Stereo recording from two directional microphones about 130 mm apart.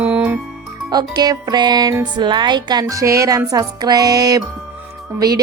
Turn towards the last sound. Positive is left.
turn(degrees=-30)  # may be behind; listen again after turning